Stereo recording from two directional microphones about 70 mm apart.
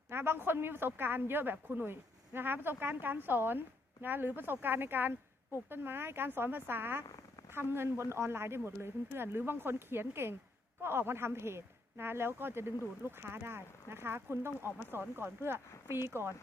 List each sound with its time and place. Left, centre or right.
0.1 s speech: right